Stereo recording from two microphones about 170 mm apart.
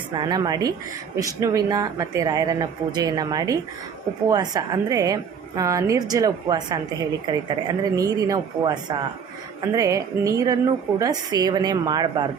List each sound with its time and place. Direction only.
0.1 s a woman's voice: 25° right (ahead or behind)